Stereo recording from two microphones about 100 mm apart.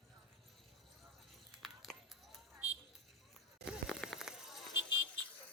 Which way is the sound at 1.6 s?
Centre (ahead or behind).